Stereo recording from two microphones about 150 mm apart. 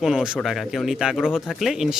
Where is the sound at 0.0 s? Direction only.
5° right (ahead or behind).